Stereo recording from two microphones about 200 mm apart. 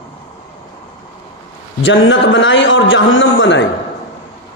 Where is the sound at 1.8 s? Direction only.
70° left (ahead or behind).